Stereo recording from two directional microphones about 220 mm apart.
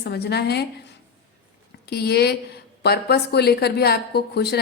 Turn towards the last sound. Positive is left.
turn(degrees=45)  # may be behind; listen again after turning